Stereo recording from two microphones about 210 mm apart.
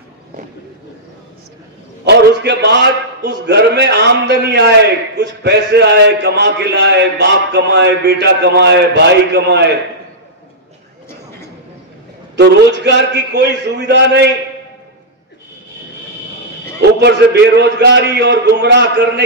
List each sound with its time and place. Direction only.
2.0 s a man's voice: 55° right (ahead or behind)
12.4 s a man's voice: 55° right (ahead or behind)
17.0 s a man's voice: 55° right (ahead or behind)